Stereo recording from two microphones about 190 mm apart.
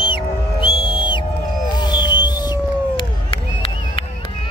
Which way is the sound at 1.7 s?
20° left (ahead or behind).